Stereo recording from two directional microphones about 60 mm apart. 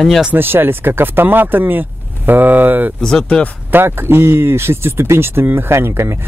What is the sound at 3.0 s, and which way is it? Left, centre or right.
Speech, centre.